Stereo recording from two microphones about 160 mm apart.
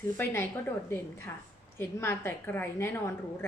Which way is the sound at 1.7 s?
15° left (ahead or behind).